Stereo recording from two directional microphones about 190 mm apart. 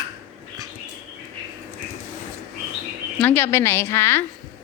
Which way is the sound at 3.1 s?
10° left (ahead or behind).